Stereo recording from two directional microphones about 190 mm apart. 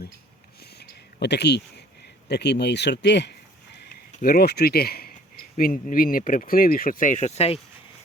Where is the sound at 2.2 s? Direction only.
60° left (ahead or behind).